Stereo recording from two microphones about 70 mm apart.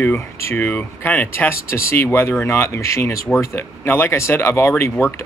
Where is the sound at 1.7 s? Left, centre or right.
Left.